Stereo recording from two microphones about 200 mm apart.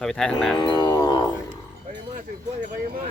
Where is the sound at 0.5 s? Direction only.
20° left (ahead or behind).